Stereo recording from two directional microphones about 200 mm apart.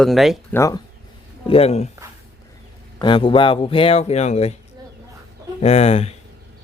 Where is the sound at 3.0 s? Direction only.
25° left (ahead or behind).